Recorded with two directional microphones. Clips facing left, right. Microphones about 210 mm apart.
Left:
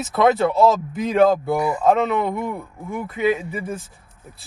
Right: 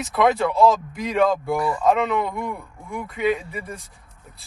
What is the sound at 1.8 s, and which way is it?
Speech, centre (ahead or behind).